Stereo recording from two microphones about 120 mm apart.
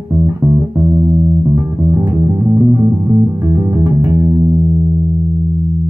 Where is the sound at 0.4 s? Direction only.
30° right (ahead or behind).